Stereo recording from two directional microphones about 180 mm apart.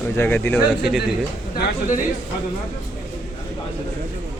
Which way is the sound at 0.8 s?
Centre (ahead or behind).